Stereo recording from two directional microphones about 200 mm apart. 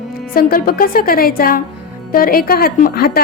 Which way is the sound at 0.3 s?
50° left (ahead or behind).